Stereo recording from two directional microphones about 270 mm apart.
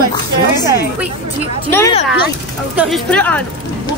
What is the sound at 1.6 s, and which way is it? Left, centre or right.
A child's voice, centre.